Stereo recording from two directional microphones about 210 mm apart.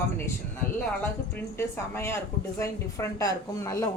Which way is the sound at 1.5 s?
10° left (ahead or behind).